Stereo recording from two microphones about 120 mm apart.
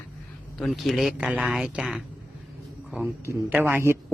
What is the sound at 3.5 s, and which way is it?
Speech, 15° right (ahead or behind).